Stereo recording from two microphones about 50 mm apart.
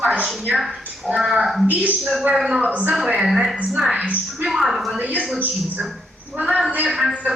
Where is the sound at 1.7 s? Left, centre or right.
Right.